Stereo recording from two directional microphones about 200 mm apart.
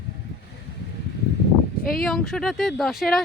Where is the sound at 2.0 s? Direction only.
Centre (ahead or behind).